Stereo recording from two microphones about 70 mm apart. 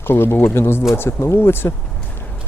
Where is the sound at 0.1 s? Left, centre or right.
Left.